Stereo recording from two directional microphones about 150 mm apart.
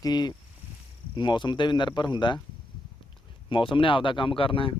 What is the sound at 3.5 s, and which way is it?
Speech, 35° left (ahead or behind).